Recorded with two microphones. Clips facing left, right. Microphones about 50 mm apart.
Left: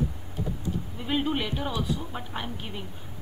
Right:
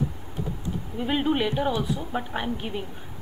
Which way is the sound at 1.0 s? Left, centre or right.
Centre.